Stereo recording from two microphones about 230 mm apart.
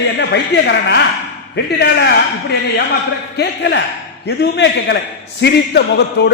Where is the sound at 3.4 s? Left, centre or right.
Left.